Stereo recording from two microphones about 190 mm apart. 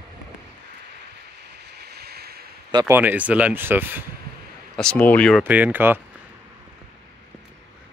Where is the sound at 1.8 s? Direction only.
55° right (ahead or behind).